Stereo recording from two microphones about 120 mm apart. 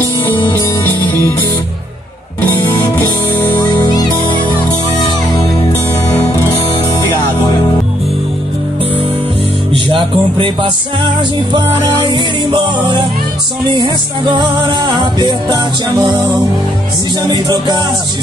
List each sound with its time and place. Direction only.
0.0 s music: 15° left (ahead or behind)
2.4 s music: 15° left (ahead or behind)
3.6 s music: 35° left (ahead or behind)
9.7 s music: 45° right (ahead or behind)
12.1 s music: 40° right (ahead or behind)
17.3 s music: 35° right (ahead or behind)